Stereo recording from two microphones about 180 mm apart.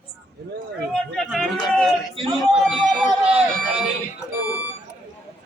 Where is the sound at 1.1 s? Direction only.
Centre (ahead or behind).